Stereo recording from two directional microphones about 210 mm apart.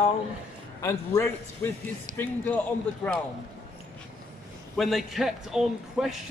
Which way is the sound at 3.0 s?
5° left (ahead or behind).